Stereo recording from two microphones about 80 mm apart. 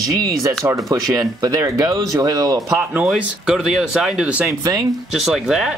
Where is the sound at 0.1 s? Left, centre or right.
Right.